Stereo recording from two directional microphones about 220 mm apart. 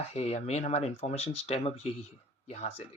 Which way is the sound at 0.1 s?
30° left (ahead or behind).